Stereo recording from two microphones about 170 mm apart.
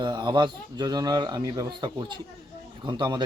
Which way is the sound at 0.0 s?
25° right (ahead or behind).